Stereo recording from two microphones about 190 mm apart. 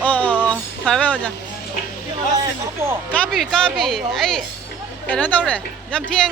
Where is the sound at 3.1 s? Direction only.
5° left (ahead or behind).